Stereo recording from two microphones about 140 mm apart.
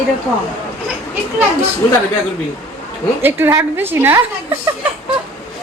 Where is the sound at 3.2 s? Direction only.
15° right (ahead or behind).